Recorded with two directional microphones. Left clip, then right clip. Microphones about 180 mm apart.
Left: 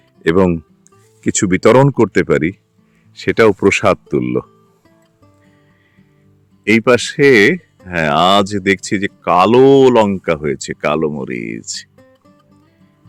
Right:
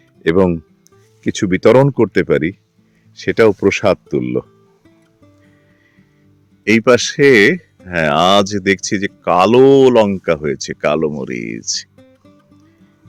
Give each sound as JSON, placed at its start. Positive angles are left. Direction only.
{"t": 0.2, "sound": "speech", "side_deg": 10}
{"t": 6.7, "sound": "speech", "side_deg": 5}